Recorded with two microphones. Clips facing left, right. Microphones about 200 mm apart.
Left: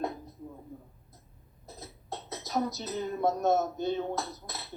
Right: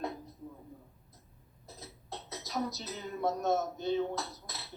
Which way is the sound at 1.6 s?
50° left (ahead or behind).